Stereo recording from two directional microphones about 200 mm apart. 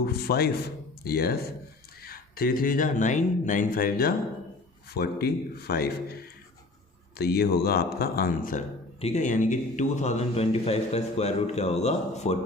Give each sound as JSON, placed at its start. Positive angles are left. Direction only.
{"t": 0.0, "sound": "speech", "side_deg": 50}
{"t": 7.2, "sound": "speech", "side_deg": 55}
{"t": 9.0, "sound": "speech", "side_deg": 35}